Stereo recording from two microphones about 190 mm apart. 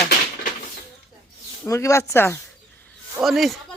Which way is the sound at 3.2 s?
Centre (ahead or behind).